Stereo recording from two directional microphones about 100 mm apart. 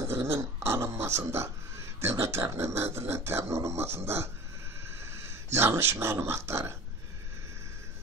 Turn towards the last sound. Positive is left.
turn(degrees=-25)  # may be behind; listen again after turning